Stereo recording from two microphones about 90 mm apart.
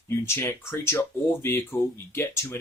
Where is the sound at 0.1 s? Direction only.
30° left (ahead or behind).